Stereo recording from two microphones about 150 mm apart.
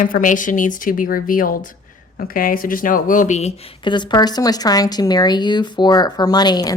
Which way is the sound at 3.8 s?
30° left (ahead or behind).